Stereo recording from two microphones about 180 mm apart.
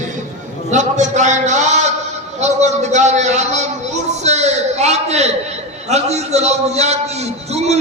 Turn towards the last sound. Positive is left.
turn(degrees=-40)  # may be behind; listen again after turning